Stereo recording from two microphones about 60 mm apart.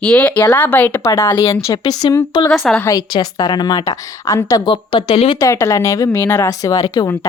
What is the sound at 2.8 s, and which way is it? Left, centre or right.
A woman's voice, left.